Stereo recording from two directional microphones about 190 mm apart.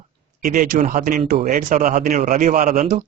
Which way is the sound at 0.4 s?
45° right (ahead or behind).